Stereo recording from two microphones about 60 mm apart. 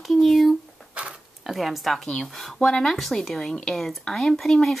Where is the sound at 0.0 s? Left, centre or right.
Centre.